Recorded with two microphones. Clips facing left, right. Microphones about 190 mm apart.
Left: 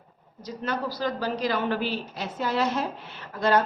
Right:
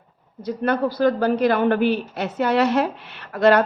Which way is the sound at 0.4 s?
55° right (ahead or behind).